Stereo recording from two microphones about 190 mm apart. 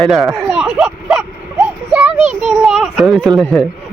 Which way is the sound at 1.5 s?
10° right (ahead or behind).